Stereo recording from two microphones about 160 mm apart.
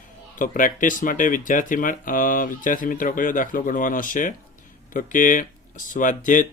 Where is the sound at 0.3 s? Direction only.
55° left (ahead or behind).